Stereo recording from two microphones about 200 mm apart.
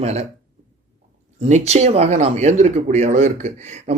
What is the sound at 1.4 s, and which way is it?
Speech, 35° right (ahead or behind).